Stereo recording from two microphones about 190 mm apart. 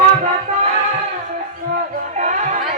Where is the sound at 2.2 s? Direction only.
40° right (ahead or behind).